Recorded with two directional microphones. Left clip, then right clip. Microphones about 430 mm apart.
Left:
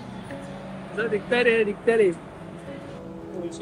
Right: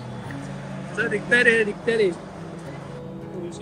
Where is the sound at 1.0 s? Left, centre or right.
Centre.